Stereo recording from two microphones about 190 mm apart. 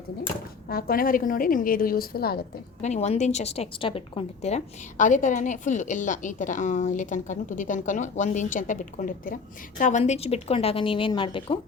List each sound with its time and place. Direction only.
0.7 s a woman's voice: 50° left (ahead or behind)
2.8 s a woman's voice: 35° left (ahead or behind)
10.0 s speech: 35° left (ahead or behind)